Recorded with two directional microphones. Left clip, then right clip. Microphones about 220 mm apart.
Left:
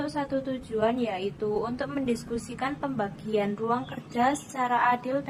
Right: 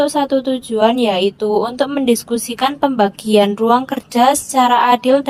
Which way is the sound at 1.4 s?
45° right (ahead or behind).